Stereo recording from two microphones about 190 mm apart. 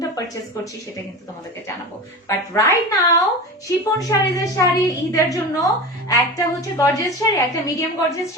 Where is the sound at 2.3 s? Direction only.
15° left (ahead or behind).